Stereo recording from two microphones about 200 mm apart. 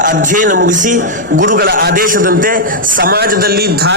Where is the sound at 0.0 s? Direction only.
40° right (ahead or behind).